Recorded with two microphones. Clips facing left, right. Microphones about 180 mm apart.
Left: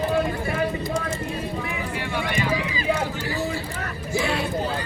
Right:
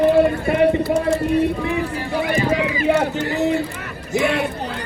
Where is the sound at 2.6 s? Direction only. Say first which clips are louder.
Right 7 dB; 65° right (ahead or behind).